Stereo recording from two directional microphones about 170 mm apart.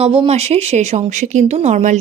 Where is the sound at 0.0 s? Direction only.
35° right (ahead or behind).